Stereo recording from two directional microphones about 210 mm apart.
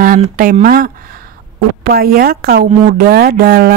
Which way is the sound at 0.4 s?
40° right (ahead or behind).